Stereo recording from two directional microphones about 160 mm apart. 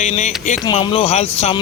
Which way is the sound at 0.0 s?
45° left (ahead or behind).